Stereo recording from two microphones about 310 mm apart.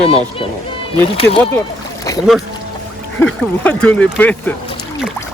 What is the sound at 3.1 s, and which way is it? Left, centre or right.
Speech, centre.